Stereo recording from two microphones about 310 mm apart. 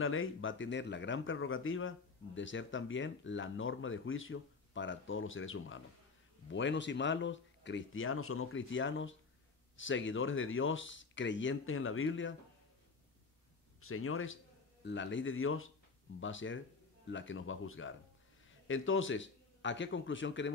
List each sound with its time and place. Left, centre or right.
0.0 s speech: left
13.7 s a man's voice: left